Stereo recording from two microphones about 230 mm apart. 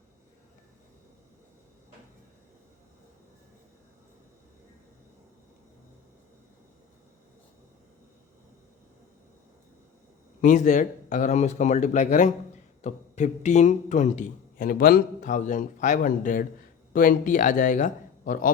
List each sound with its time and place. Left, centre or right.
10.4 s a man's voice: left